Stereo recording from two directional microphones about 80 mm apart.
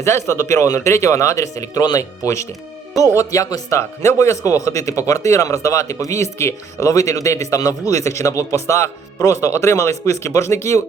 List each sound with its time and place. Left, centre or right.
0.0 s speech: left